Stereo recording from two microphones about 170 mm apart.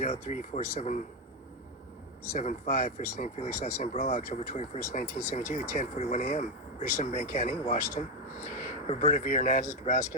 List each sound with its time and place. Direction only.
0.0 s speech: 40° left (ahead or behind)
2.3 s speech: 45° left (ahead or behind)